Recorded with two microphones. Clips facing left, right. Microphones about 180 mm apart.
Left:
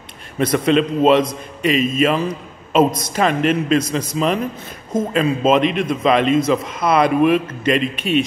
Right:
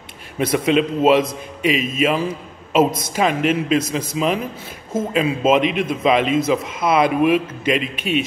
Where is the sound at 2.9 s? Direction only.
25° right (ahead or behind).